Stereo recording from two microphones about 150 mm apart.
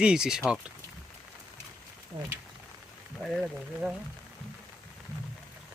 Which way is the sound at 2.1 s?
30° right (ahead or behind).